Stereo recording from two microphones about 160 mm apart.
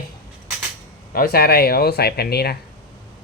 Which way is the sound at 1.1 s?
70° left (ahead or behind).